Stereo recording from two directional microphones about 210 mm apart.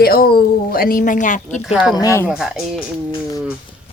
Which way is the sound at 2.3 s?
5° right (ahead or behind).